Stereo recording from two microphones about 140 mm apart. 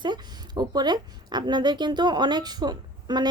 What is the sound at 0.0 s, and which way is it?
A woman's voice, 30° right (ahead or behind).